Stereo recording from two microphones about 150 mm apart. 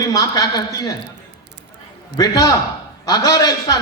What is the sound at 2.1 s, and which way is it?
A man's voice, 25° left (ahead or behind).